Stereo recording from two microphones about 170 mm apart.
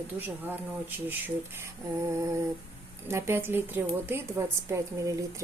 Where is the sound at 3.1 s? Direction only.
15° right (ahead or behind).